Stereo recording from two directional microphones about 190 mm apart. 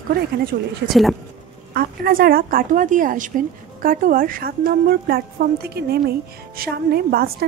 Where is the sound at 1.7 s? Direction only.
55° right (ahead or behind).